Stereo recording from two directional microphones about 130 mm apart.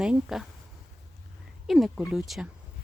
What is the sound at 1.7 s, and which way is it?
Speech, centre (ahead or behind).